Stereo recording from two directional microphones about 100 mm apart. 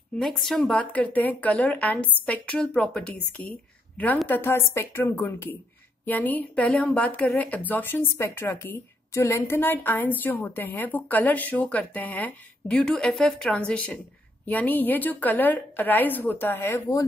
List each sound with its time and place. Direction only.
0.2 s speech: centre (ahead or behind)
0.7 s speech: 15° left (ahead or behind)
4.3 s a woman's voice: 25° left (ahead or behind)